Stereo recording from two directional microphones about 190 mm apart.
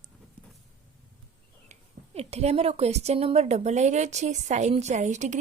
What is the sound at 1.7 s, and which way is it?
A woman's voice, 35° right (ahead or behind).